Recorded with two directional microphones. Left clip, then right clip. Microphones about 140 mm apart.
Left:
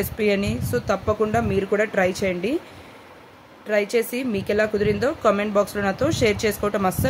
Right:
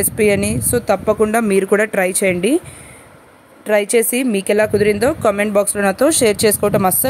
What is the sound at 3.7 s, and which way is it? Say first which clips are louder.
Speech: right 7 dB; 60° right (ahead or behind).